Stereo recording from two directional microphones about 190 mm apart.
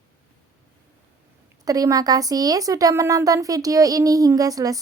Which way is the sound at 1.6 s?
20° right (ahead or behind).